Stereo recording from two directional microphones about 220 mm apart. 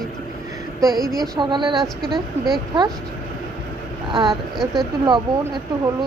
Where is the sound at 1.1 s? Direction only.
Centre (ahead or behind).